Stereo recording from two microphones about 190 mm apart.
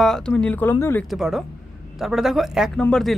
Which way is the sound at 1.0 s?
Centre (ahead or behind).